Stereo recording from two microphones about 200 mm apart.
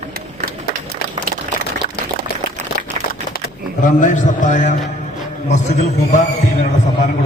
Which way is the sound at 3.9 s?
40° left (ahead or behind).